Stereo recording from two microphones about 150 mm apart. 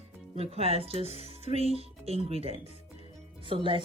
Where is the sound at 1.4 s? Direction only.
40° right (ahead or behind).